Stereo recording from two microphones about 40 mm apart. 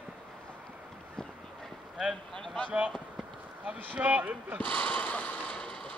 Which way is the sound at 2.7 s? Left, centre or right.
Right.